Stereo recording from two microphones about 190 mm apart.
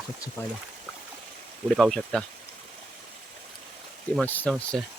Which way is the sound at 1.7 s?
Centre (ahead or behind).